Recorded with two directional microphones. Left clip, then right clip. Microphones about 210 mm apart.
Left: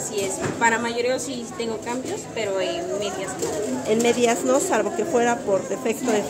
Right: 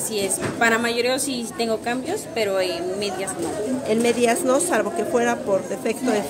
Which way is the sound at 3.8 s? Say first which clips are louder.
Even; centre (ahead or behind).